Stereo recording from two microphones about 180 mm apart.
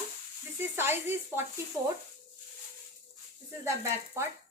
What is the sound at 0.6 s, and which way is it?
Speech, 10° right (ahead or behind).